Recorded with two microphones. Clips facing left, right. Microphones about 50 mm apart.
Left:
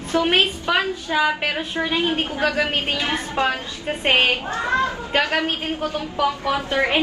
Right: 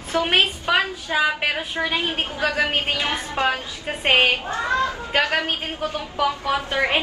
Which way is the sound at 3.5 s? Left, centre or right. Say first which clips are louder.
Left 1 dB; centre.